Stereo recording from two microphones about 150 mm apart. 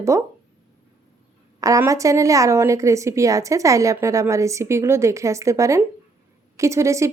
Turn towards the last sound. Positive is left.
turn(degrees=-20)  # may be behind; listen again after turning